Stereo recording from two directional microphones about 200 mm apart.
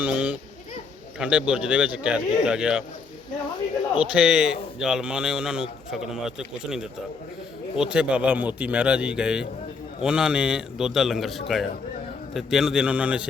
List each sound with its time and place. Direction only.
0.0 s a man's voice: 5° right (ahead or behind)
4.1 s a man's voice: 5° right (ahead or behind)